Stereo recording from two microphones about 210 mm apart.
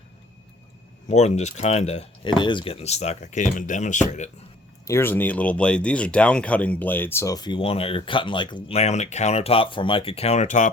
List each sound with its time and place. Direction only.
1.0 s speech: 35° left (ahead or behind)
4.9 s speech: 10° left (ahead or behind); by 10.7 s 35° left (ahead or behind)